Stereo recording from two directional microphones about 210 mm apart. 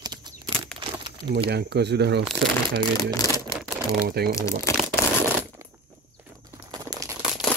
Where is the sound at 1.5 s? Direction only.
50° right (ahead or behind).